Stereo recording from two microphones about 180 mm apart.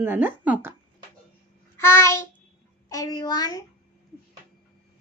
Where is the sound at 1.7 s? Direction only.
15° left (ahead or behind).